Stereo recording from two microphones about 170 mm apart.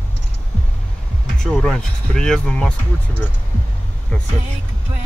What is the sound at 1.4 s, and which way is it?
Speech, 5° left (ahead or behind).